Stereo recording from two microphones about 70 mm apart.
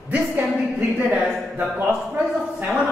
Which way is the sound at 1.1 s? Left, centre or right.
Centre.